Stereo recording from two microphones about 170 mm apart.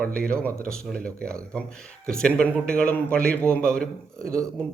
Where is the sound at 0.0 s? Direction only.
5° left (ahead or behind).